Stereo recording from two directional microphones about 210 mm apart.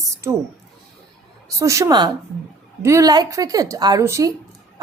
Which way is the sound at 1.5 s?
15° right (ahead or behind).